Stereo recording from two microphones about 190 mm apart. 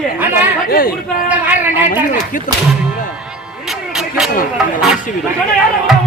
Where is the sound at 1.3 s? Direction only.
10° right (ahead or behind).